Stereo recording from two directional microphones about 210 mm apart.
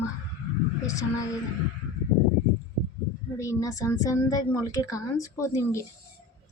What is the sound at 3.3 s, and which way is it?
Speech, 15° left (ahead or behind).